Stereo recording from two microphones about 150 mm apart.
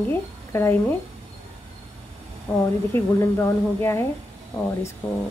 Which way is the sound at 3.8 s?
15° left (ahead or behind).